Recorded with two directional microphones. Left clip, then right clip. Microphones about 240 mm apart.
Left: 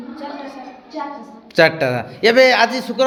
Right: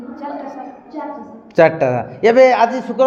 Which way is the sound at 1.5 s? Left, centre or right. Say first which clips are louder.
Right 2 dB; centre.